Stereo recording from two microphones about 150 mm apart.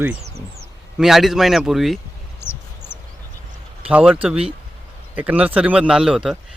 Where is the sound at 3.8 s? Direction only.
10° right (ahead or behind).